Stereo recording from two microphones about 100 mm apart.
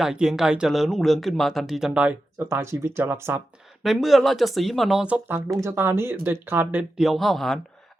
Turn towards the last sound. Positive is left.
turn(degrees=0)  # may be behind; listen again after turning